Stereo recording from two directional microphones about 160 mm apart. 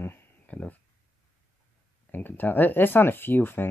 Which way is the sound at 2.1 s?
10° left (ahead or behind).